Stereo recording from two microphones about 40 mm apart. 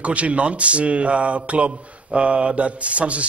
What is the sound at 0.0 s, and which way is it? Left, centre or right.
Speech, right.